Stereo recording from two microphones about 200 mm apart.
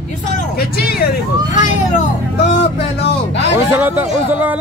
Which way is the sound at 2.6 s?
60° left (ahead or behind).